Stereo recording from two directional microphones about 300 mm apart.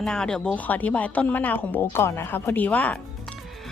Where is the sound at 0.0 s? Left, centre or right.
Centre.